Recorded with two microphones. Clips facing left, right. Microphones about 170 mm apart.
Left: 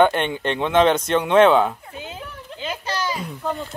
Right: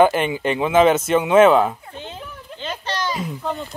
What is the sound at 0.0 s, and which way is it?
Speech, 5° right (ahead or behind).